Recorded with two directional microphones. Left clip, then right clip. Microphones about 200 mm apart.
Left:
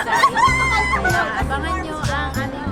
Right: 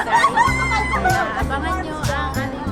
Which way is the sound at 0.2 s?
25° left (ahead or behind).